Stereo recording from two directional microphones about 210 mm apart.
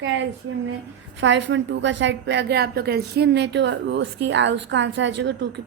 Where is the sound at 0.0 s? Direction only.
60° right (ahead or behind).